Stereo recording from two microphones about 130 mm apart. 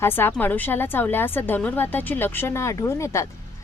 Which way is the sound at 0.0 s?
15° left (ahead or behind).